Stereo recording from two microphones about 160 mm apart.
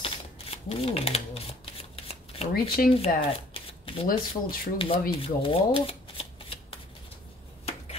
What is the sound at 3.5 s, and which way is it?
Shuffling cards, 35° left (ahead or behind).